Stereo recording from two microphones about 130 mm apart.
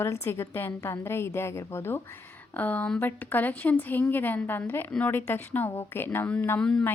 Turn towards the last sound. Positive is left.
turn(degrees=5)  # may be behind; listen again after turning